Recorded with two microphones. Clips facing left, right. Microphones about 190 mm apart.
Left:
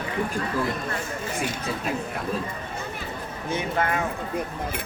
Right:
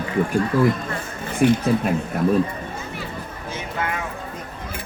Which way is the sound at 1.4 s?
60° right (ahead or behind).